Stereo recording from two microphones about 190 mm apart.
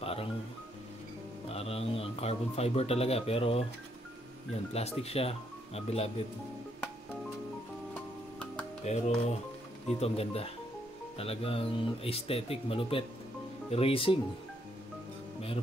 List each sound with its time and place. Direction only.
0.0 s music: 30° left (ahead or behind)
1.5 s speech: 30° left (ahead or behind)
5.0 s speech: 30° left (ahead or behind)
8.8 s speech: 35° left (ahead or behind)